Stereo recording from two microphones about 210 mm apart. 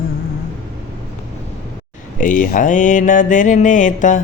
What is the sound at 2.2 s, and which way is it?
Mantra, 40° left (ahead or behind).